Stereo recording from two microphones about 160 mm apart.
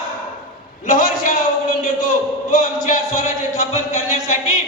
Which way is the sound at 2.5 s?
55° left (ahead or behind).